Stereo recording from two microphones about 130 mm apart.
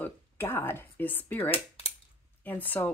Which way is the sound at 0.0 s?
15° left (ahead or behind).